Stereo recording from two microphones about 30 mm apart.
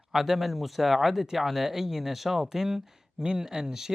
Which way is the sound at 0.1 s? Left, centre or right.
Centre.